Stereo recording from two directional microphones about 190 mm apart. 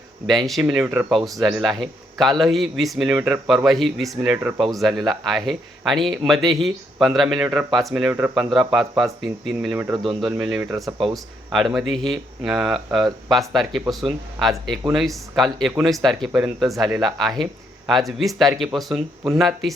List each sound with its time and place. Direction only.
0.3 s speech: centre (ahead or behind)
10.8 s speech: 15° right (ahead or behind)
11.5 s speech: centre (ahead or behind)